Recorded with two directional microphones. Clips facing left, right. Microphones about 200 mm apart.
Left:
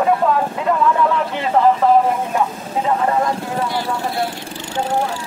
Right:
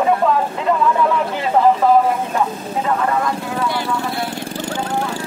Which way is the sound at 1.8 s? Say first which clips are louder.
Even; 5° right (ahead or behind).